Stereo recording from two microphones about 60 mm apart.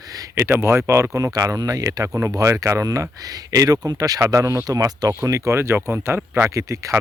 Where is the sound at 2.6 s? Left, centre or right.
Right.